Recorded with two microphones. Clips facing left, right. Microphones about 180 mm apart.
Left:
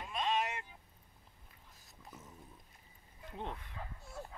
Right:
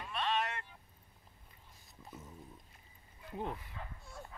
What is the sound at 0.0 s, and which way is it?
Vehicle, 15° left (ahead or behind).